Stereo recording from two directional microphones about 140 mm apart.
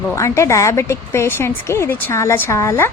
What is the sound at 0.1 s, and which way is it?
A woman's voice, 20° left (ahead or behind).